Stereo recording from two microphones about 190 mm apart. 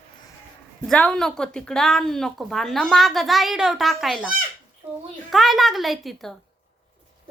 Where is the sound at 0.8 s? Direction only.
5° left (ahead or behind).